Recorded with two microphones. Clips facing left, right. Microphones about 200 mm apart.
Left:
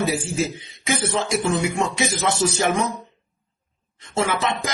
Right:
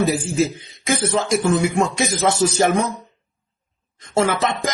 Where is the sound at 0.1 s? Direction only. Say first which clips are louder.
Right 4 dB; 45° right (ahead or behind).